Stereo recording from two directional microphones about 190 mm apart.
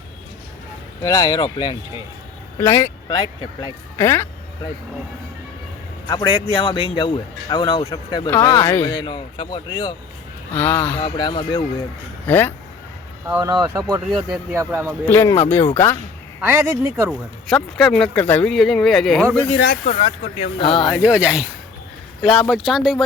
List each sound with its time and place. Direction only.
1.0 s a man's voice: 20° left (ahead or behind)
3.1 s a man's voice: 25° left (ahead or behind)
3.9 s speech: 15° left (ahead or behind)
6.1 s a man's voice: 20° left (ahead or behind)
10.9 s a man's voice: 25° left (ahead or behind)
12.3 s speech: 10° left (ahead or behind)
13.2 s speech: 10° right (ahead or behind)
14.1 s speech: centre (ahead or behind)
14.5 s speech: 10° right (ahead or behind)
15.0 s speech: 10° left (ahead or behind)
17.1 s speech: centre (ahead or behind)
19.5 s speech: 55° left (ahead or behind)
19.8 s speech: 35° left (ahead or behind)
21.0 s speech: 5° right (ahead or behind)